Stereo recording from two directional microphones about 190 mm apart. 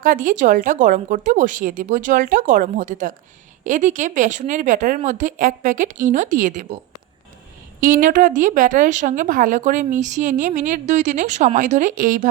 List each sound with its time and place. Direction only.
0.0 s a woman's voice: 45° right (ahead or behind)
7.8 s speech: 45° right (ahead or behind)